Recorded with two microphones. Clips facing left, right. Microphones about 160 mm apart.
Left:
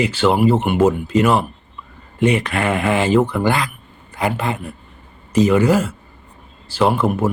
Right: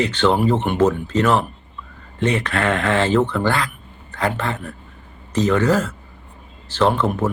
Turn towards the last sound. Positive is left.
turn(degrees=10)  # may be behind; listen again after turning